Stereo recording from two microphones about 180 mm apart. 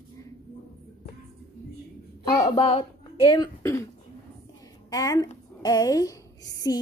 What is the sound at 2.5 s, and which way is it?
Speech, 30° left (ahead or behind).